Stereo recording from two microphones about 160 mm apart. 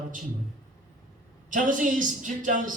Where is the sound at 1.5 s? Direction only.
55° right (ahead or behind).